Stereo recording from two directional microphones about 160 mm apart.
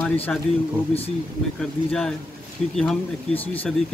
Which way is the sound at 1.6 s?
5° left (ahead or behind).